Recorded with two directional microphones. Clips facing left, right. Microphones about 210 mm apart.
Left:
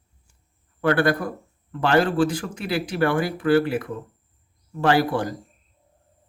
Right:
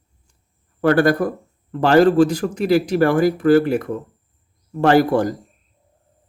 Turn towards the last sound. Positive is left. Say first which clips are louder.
# right 6 dB
turn(degrees=-45)  # may be behind; listen again after turning